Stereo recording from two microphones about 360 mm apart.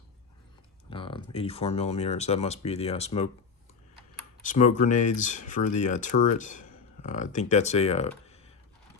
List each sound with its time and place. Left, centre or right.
0.9 s speech: centre
4.7 s speech: left
8.3 s typing: centre